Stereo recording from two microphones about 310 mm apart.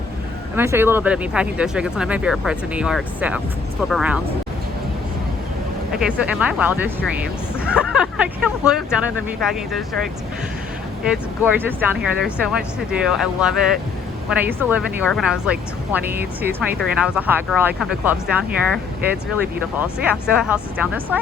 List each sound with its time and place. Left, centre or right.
0.5 s speech: centre
6.0 s speech: centre
11.1 s speech: centre
19.8 s speech: centre